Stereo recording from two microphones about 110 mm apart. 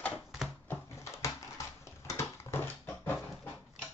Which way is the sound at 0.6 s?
25° left (ahead or behind).